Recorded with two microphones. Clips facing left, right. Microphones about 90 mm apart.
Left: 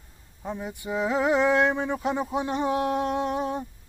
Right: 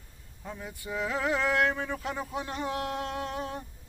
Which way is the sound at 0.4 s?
20° left (ahead or behind).